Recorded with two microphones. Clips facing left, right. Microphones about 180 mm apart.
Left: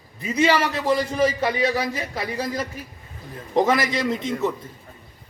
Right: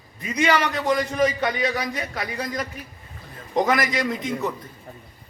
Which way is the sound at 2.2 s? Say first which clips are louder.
Left 2 dB; 30° left (ahead or behind).